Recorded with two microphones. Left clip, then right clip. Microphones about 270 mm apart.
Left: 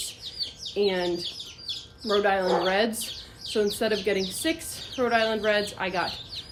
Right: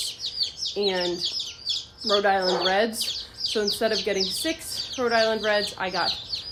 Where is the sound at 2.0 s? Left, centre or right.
Centre.